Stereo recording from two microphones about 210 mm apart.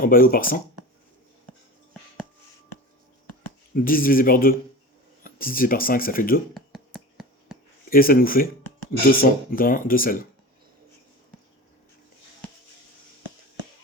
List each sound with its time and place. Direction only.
0.0 s speech: 45° left (ahead or behind)
3.8 s speech: 45° left (ahead or behind)
6.5 s a sound: centre (ahead or behind)
7.9 s speech: 45° left (ahead or behind)